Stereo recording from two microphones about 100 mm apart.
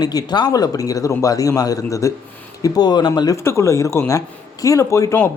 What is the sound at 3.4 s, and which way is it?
Speech, 30° left (ahead or behind).